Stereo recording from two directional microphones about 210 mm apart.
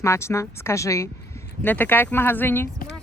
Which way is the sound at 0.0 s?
15° left (ahead or behind).